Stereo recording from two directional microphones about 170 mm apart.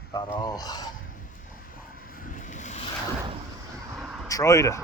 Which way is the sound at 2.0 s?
55° left (ahead or behind).